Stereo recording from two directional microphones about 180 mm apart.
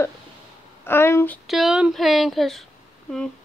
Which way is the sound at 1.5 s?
Centre (ahead or behind).